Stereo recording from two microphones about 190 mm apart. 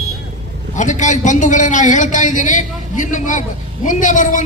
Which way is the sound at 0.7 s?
40° left (ahead or behind).